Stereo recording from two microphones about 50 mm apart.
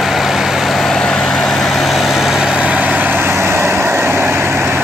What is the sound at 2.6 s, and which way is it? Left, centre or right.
Vehicle, right.